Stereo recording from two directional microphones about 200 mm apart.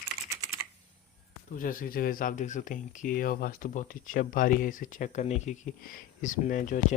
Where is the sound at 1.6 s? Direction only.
45° left (ahead or behind).